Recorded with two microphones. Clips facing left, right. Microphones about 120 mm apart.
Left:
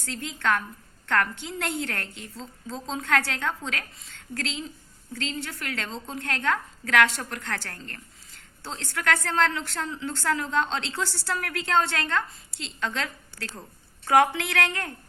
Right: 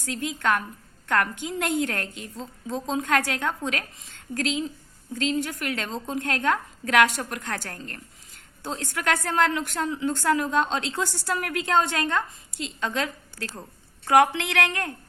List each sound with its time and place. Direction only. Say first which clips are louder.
0.0 s a woman's voice: right 2 dB; 15° right (ahead or behind)